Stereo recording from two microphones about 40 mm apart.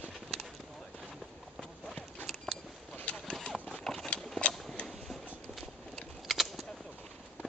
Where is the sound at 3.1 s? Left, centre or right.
Left.